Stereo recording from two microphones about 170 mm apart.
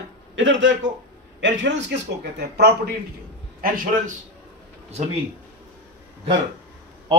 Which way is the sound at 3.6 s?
55° right (ahead or behind).